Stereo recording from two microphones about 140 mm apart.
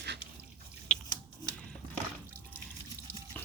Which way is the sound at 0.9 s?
10° left (ahead or behind).